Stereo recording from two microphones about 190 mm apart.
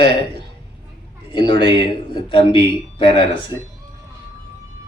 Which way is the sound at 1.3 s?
25° left (ahead or behind).